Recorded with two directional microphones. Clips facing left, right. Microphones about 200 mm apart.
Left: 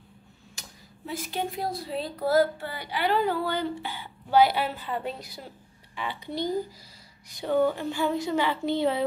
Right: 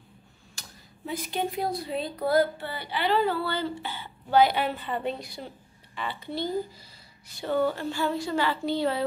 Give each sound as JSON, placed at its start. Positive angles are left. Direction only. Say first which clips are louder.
{"t": 1.0, "sound": "speech", "louder": "right 1 dB", "side_deg": 0}
{"t": 5.9, "sound": "speech", "louder": "left 1 dB", "side_deg": 15}